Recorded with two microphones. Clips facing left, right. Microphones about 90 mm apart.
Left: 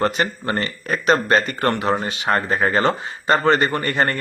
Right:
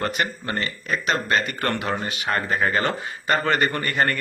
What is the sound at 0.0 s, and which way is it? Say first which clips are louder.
A man's voice: left 5 dB; 35° left (ahead or behind).